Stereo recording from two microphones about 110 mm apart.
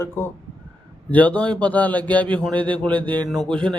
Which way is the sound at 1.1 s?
15° left (ahead or behind).